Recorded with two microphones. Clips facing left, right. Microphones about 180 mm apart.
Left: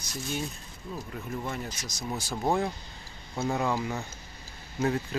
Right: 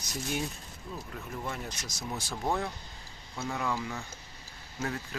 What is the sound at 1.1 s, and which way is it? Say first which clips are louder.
Speech: left 3 dB; centre (ahead or behind).